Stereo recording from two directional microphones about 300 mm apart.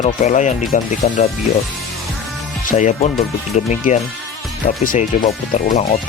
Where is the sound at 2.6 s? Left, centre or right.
Left.